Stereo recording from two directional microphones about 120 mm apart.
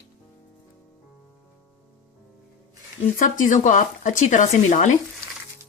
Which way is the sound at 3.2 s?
90° left.